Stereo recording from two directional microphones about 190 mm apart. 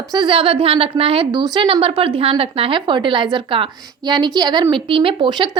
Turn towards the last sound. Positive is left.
turn(degrees=-25)  # may be behind; listen again after turning